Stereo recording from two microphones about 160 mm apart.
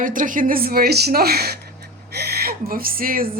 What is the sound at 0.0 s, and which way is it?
A woman's voice, 55° right (ahead or behind).